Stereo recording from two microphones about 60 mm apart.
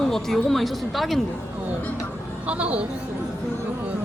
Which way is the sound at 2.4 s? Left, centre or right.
Right.